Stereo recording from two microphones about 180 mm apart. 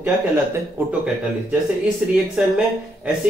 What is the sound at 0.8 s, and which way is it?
Speech, 10° right (ahead or behind).